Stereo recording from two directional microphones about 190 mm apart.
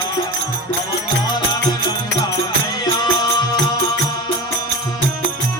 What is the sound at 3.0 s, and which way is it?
Music, 20° left (ahead or behind).